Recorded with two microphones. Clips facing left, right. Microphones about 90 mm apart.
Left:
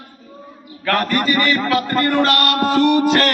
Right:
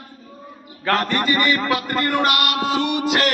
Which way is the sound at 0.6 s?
20° right (ahead or behind).